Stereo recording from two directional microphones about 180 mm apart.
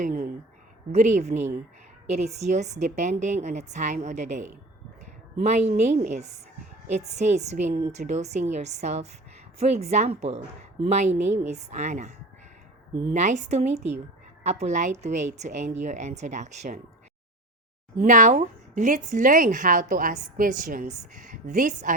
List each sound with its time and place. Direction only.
0.0 s speech: 50° right (ahead or behind)
0.9 s a woman's voice: 40° right (ahead or behind)
13.1 s a woman's voice: 40° right (ahead or behind)
17.9 s speech: 45° right (ahead or behind)